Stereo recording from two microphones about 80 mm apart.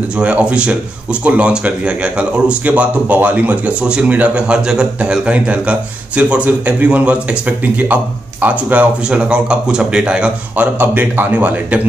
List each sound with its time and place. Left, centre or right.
0.2 s speech: centre